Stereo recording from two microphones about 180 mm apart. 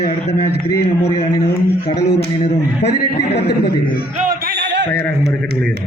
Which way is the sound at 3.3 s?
65° left (ahead or behind).